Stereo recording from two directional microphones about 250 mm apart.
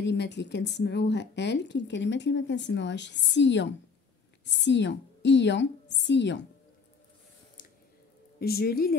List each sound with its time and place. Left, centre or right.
0.0 s a woman's voice: left
8.4 s speech: left